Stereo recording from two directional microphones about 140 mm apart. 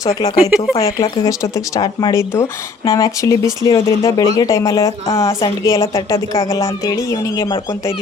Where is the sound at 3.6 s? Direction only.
35° left (ahead or behind).